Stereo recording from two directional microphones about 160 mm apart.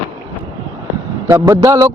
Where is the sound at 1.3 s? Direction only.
20° right (ahead or behind).